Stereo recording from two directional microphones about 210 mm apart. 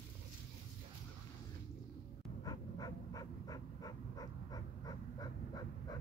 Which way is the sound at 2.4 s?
20° left (ahead or behind).